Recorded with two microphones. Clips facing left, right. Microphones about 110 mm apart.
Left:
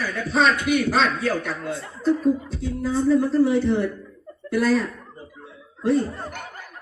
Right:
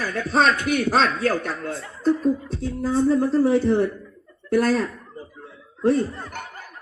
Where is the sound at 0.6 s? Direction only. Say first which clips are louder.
Even; centre (ahead or behind).